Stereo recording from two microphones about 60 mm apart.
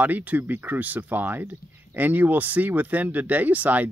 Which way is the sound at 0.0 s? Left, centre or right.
Right.